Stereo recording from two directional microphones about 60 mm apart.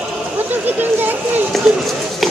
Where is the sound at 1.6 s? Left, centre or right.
Centre.